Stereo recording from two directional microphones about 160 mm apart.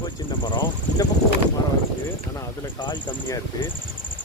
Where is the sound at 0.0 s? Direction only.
25° left (ahead or behind).